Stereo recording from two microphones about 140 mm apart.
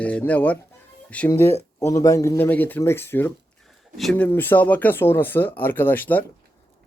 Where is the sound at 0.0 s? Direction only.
10° left (ahead or behind).